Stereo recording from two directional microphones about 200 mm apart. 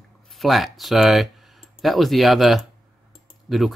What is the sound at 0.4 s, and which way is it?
Speech, centre (ahead or behind).